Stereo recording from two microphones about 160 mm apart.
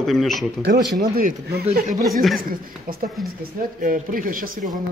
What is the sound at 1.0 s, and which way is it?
Speech, 75° right (ahead or behind).